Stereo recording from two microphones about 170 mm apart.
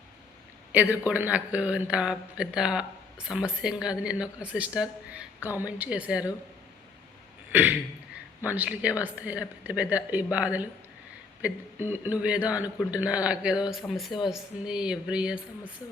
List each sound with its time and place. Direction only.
1.0 s speech: 10° right (ahead or behind)
7.5 s speech: 10° right (ahead or behind)